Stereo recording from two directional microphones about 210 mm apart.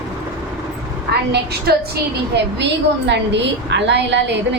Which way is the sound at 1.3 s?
50° right (ahead or behind).